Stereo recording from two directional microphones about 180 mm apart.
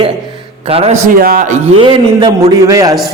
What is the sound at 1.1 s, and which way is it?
Speech, 55° right (ahead or behind).